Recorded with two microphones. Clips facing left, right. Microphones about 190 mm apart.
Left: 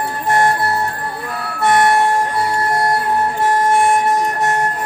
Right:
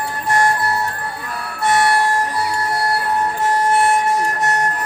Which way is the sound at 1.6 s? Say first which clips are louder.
Left 3 dB; 50° left (ahead or behind).